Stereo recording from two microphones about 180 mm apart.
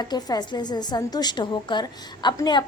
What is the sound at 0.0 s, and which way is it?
A woman's voice, 25° left (ahead or behind).